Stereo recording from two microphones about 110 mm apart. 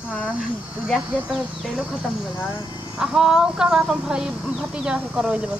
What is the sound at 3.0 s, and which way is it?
Speech, 5° right (ahead or behind).